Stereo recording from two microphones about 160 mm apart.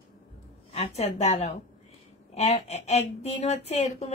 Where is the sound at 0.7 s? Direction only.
45° left (ahead or behind).